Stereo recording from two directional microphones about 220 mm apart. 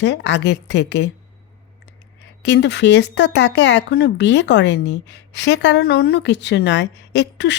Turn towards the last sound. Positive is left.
turn(degrees=50)  # may be behind; listen again after turning